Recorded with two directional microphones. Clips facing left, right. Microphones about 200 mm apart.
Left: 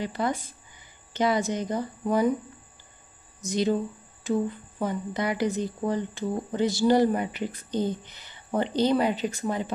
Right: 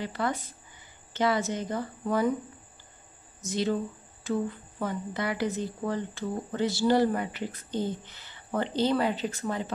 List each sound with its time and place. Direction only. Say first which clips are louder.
0.0 s speech: left 2 dB; 15° left (ahead or behind)
3.3 s speech: left 3 dB; 15° left (ahead or behind)